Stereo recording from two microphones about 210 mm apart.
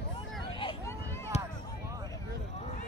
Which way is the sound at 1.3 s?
30° left (ahead or behind).